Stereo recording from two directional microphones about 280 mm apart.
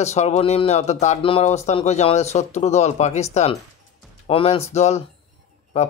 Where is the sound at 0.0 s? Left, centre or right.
Left.